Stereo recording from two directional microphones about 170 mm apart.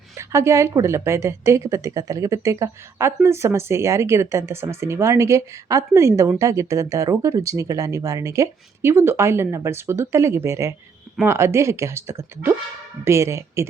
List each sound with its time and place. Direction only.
0.2 s speech: 15° right (ahead or behind)